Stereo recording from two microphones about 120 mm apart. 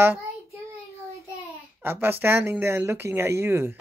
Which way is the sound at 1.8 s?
20° right (ahead or behind).